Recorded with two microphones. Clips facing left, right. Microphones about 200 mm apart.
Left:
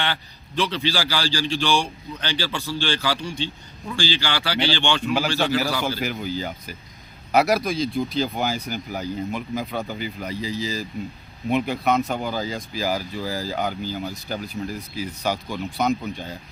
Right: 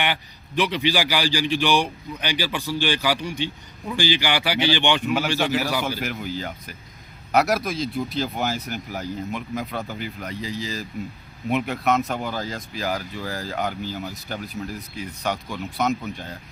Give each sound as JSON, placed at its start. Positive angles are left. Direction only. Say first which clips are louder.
{"t": 0.0, "sound": "a man's voice", "louder": "right 2 dB", "side_deg": -15}
{"t": 6.0, "sound": "speech", "louder": "left 2 dB", "side_deg": 0}